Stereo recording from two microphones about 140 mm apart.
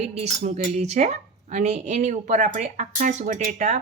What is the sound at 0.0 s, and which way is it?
Speech, 50° right (ahead or behind).